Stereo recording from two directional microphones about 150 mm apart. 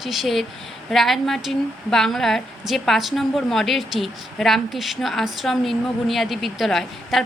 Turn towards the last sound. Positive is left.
turn(degrees=0)  # may be behind; listen again after turning